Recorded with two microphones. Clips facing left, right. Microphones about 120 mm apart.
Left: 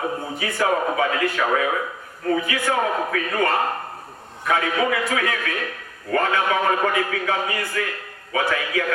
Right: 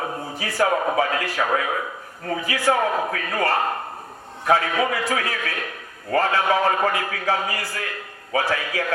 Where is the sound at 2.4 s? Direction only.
35° right (ahead or behind).